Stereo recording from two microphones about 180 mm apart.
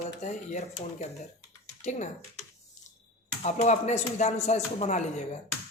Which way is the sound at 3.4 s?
40° left (ahead or behind).